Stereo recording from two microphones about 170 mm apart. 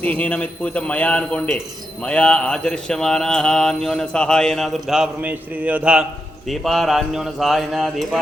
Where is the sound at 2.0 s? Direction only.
5° left (ahead or behind).